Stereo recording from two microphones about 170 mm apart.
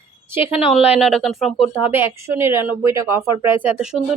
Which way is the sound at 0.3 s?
15° right (ahead or behind).